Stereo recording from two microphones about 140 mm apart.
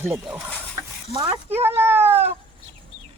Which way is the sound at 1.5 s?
15° right (ahead or behind).